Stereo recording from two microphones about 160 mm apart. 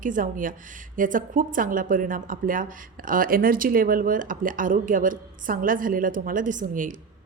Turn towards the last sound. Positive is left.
turn(degrees=-55)  # may be behind; listen again after turning